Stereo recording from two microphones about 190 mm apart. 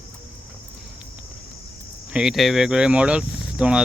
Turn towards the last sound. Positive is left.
turn(degrees=-5)  # may be behind; listen again after turning